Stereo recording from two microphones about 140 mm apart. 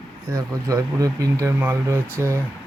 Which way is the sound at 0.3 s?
25° right (ahead or behind).